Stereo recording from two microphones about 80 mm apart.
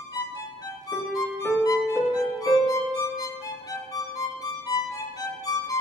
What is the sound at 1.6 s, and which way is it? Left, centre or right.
Music, left.